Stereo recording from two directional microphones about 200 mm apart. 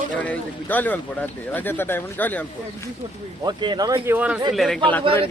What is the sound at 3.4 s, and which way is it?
A man's voice, 20° right (ahead or behind).